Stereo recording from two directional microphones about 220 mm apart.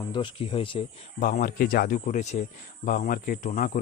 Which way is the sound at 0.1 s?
20° left (ahead or behind).